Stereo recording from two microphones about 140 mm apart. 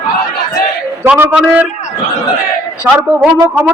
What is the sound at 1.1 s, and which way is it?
Speech, 10° right (ahead or behind).